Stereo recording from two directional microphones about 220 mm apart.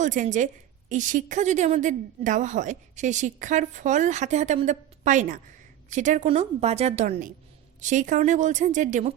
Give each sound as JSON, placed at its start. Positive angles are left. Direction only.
{"t": 0.0, "sound": "a woman's voice", "side_deg": -35}